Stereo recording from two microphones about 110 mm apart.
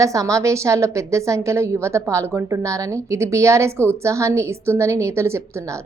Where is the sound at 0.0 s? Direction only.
30° right (ahead or behind).